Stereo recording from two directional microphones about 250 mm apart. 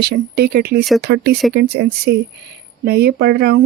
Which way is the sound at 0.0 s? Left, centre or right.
Right.